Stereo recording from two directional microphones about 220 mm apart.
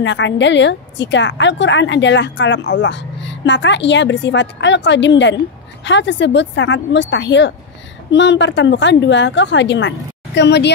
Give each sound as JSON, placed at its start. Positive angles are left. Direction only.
{"t": 0.0, "sound": "a woman's voice", "side_deg": 55}